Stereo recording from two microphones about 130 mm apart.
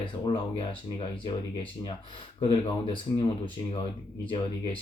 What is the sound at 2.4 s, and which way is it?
Speech, 45° left (ahead or behind).